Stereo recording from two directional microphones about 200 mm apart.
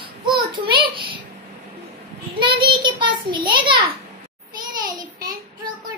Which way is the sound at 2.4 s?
25° right (ahead or behind).